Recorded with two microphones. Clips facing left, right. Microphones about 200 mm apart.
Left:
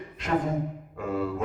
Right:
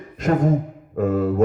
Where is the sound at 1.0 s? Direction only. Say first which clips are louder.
Right 9 dB; 45° right (ahead or behind).